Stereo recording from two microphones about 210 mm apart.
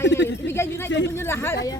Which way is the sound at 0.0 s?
60° left (ahead or behind).